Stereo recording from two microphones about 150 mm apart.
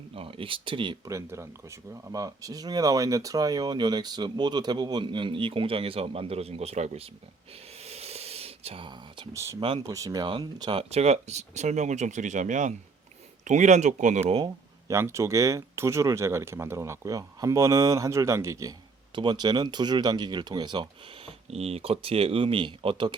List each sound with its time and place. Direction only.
0.1 s speech: 40° right (ahead or behind)
1.1 s speech: 20° right (ahead or behind); by 7.1 s 45° right (ahead or behind)
7.9 s a sound: 45° right (ahead or behind)
9.3 s speech: 20° right (ahead or behind)
9.6 s speech: 35° right (ahead or behind)
9.8 s speech: 20° right (ahead or behind); by 14.3 s 50° right (ahead or behind)
14.3 s speech: 25° right (ahead or behind)
19.1 s speech: 30° right (ahead or behind)
21.2 s speech: 40° right (ahead or behind)